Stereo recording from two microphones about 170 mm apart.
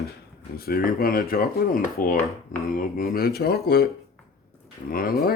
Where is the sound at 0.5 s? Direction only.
65° left (ahead or behind).